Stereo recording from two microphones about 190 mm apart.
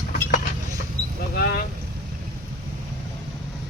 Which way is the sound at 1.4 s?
55° left (ahead or behind).